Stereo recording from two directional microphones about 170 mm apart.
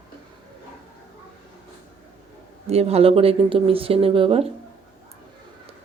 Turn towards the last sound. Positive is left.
turn(degrees=-35)  # may be behind; listen again after turning